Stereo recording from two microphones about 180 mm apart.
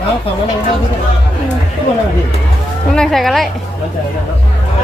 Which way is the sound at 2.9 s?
5° left (ahead or behind).